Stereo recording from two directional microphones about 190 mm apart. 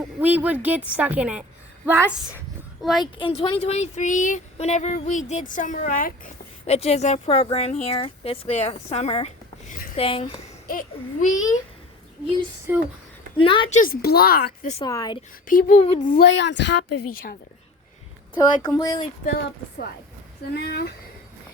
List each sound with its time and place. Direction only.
0.2 s speech: 10° right (ahead or behind)
3.0 s speech: 25° left (ahead or behind); by 6.1 s 45° left (ahead or behind)
6.7 s speech: 35° left (ahead or behind)
10.7 s speech: 45° left (ahead or behind)
12.7 s speech: 10° right (ahead or behind)
13.3 s speech: 25° left (ahead or behind)
13.7 s speech: 45° left (ahead or behind)
14.8 s speech: 20° left (ahead or behind)
15.4 s speech: 45° left (ahead or behind)
15.8 s speech: 30° left (ahead or behind)
16.0 s speech: 50° left (ahead or behind)
16.3 s a woman's voice: 70° left (ahead or behind); by 17.3 s 50° left (ahead or behind)
18.3 s speech: 20° left (ahead or behind)
20.5 s speech: 55° left (ahead or behind)